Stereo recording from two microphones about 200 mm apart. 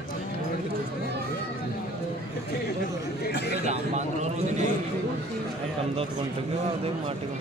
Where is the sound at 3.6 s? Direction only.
35° right (ahead or behind).